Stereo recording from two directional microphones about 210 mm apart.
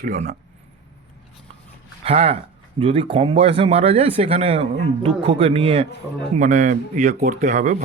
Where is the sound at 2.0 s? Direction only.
30° right (ahead or behind).